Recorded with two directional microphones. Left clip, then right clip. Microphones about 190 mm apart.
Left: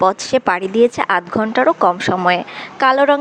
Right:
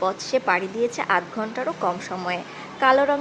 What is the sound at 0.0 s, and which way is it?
Speech, 55° left (ahead or behind).